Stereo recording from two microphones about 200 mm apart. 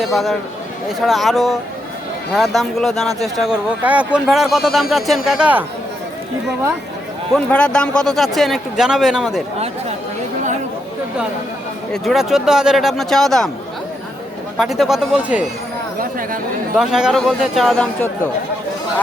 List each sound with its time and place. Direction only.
0.0 s speech: centre (ahead or behind)
7.3 s speech: 5° left (ahead or behind)
12.0 s speech: centre (ahead or behind)
14.6 s speech: centre (ahead or behind)
16.0 s speech: 45° right (ahead or behind)
16.7 s speech: 5° right (ahead or behind)